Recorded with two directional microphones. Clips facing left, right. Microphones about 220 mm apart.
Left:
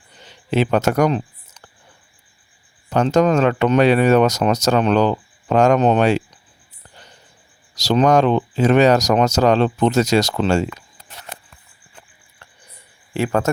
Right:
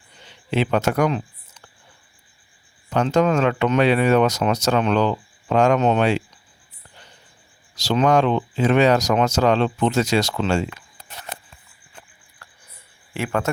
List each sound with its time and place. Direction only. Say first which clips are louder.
0.3 s speech: left 3 dB; 40° left (ahead or behind)
2.9 s speech: left 3 dB; 40° left (ahead or behind)
7.8 s speech: left 3 dB; 40° left (ahead or behind)
13.1 s speech: left 5 dB; 35° left (ahead or behind)